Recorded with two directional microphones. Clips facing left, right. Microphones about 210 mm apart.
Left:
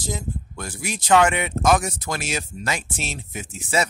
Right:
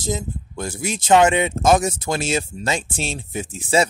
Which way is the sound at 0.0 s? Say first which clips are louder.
Right 4 dB; 25° right (ahead or behind).